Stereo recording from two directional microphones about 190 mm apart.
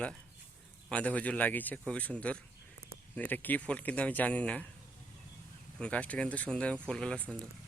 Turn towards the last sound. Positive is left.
turn(degrees=5)  # may be behind; listen again after turning